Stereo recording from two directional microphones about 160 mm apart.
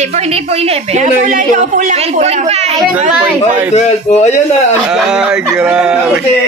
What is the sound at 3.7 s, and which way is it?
Speech, 45° left (ahead or behind).